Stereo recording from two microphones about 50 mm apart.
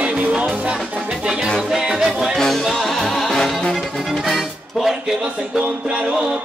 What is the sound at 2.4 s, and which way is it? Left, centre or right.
Music, centre.